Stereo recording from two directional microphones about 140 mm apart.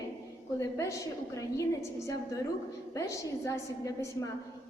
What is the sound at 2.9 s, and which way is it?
A woman's voice, 25° left (ahead or behind).